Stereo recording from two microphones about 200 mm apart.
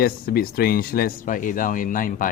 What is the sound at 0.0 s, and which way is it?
Speech, 50° left (ahead or behind).